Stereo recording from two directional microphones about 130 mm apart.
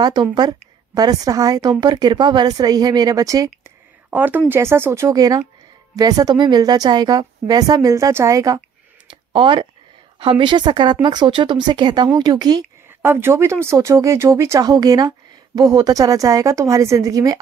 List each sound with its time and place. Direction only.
0.0 s a woman's voice: 35° right (ahead or behind)
3.6 s a sound: 15° right (ahead or behind)
4.5 s speech: 20° right (ahead or behind)
9.3 s a woman's voice: 40° right (ahead or behind)
13.0 s speech: 15° right (ahead or behind)